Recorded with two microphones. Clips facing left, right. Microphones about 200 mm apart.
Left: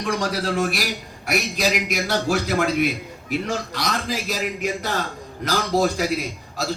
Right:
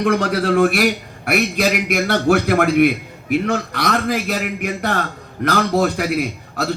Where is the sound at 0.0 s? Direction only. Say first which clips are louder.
Right 6 dB; 60° right (ahead or behind).